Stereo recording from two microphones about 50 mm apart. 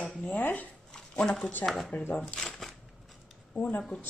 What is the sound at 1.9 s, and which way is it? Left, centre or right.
Speech, left.